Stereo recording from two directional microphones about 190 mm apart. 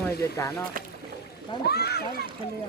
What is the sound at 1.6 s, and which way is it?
Speech, 60° left (ahead or behind).